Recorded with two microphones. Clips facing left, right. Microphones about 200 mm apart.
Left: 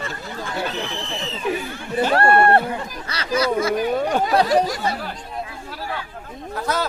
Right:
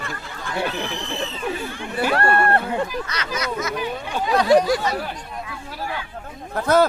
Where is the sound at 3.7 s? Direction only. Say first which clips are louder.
Left 6 dB; 45° left (ahead or behind).